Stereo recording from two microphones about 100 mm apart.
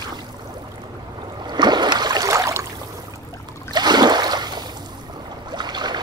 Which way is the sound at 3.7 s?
45° right (ahead or behind).